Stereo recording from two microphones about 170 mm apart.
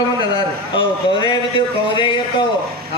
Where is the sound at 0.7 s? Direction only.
30° left (ahead or behind).